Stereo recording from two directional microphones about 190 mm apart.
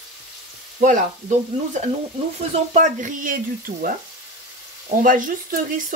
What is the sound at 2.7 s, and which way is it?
A woman's voice, 40° right (ahead or behind).